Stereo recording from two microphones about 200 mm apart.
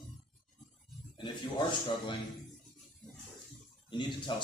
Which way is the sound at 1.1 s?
25° left (ahead or behind).